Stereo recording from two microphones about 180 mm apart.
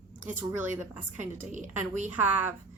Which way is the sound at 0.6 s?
10° right (ahead or behind).